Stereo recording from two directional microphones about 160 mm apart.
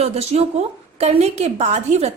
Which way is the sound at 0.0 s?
40° right (ahead or behind).